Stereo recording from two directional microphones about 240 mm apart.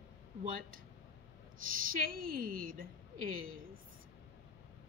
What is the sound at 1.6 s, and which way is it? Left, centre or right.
A woman's voice, right.